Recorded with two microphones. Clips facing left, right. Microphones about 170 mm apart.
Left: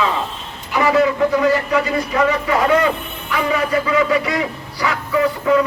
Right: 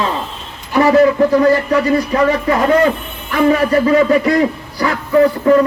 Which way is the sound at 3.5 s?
45° right (ahead or behind).